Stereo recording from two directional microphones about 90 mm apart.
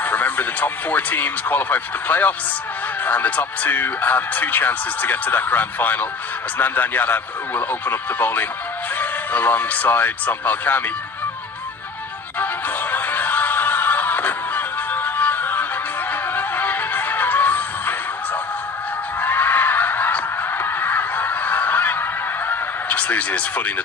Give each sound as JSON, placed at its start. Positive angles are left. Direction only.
{"t": 0.0, "sound": "speech", "side_deg": 20}
{"t": 12.4, "sound": "music", "side_deg": 20}
{"t": 19.2, "sound": "music", "side_deg": 20}
{"t": 22.4, "sound": "a sound", "side_deg": 15}